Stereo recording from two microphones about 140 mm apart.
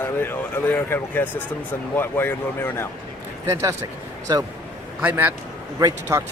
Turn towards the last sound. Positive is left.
turn(degrees=-25)  # may be behind; listen again after turning